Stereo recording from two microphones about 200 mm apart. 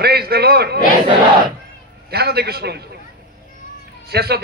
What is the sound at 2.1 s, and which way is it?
Speech, 55° right (ahead or behind).